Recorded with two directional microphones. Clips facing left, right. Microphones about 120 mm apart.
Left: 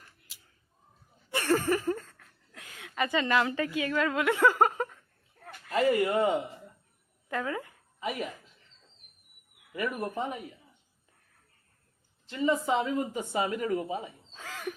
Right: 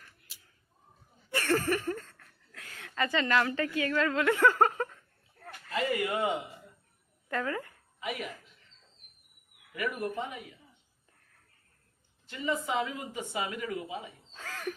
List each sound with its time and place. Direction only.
1.3 s a sound: 20° left (ahead or behind)
2.0 s laughter: 5° left (ahead or behind)
2.5 s a woman's voice: 15° left (ahead or behind)
5.7 s speech: 35° left (ahead or behind)
7.3 s a woman's voice: 15° left (ahead or behind)
7.9 s speech: 35° left (ahead or behind)
9.7 s speech: 35° left (ahead or behind)
12.3 s speech: 30° left (ahead or behind)
14.3 s a sound: 10° left (ahead or behind)